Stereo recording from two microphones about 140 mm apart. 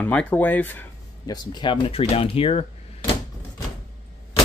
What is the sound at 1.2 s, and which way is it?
Speech, 30° left (ahead or behind).